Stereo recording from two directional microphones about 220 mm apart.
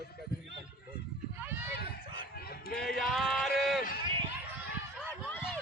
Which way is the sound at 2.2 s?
45° left (ahead or behind).